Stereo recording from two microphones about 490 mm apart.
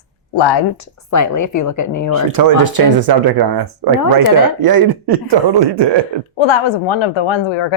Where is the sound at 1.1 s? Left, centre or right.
Left.